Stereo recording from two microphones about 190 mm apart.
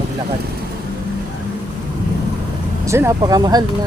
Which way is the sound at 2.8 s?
15° right (ahead or behind).